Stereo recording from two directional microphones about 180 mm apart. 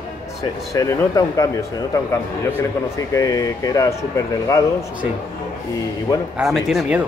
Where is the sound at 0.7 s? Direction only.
20° left (ahead or behind).